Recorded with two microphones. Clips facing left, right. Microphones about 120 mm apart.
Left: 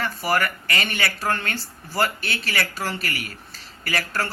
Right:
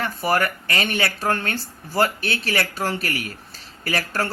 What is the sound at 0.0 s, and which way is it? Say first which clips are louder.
Speech: right 2 dB; 20° right (ahead or behind).